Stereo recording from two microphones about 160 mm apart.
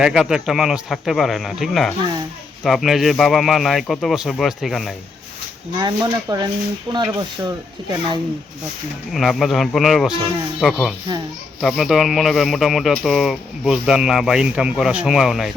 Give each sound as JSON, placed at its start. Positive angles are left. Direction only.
{"t": 0.0, "sound": "speech", "side_deg": -5}
{"t": 5.7, "sound": "speech", "side_deg": -25}
{"t": 9.1, "sound": "speech", "side_deg": 0}